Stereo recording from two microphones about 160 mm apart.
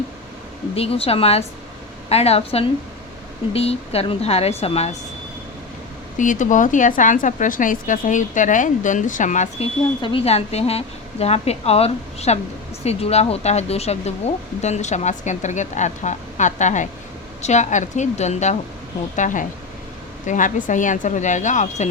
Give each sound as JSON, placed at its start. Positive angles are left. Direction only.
{"t": 0.8, "sound": "a woman's voice", "side_deg": 35}
{"t": 6.1, "sound": "speech", "side_deg": 55}
{"t": 10.0, "sound": "a woman's voice", "side_deg": 35}